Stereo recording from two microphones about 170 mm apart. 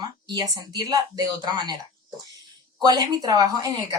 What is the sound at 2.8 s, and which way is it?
Speech, 25° right (ahead or behind).